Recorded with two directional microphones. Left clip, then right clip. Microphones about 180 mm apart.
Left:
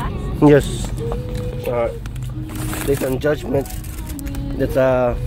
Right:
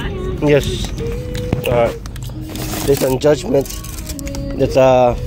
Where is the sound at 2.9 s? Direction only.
20° right (ahead or behind).